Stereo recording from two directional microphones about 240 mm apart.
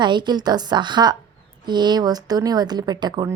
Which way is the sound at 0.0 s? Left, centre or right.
Centre.